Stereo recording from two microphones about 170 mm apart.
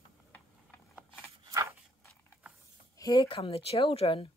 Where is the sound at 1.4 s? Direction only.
20° right (ahead or behind).